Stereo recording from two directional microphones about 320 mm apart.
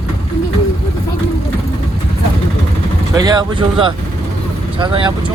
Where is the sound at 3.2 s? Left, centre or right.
Centre.